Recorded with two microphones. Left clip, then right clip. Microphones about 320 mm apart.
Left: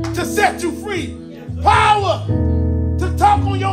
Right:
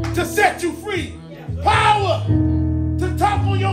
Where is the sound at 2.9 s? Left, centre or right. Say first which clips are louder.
Left 6 dB; centre.